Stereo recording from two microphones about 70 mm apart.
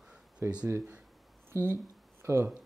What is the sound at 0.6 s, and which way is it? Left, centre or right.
Speech, right.